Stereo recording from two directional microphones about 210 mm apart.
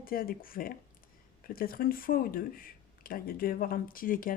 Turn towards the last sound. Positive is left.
turn(degrees=40)  # may be behind; listen again after turning